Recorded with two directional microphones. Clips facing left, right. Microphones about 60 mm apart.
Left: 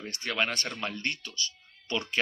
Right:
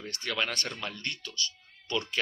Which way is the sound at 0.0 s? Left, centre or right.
Centre.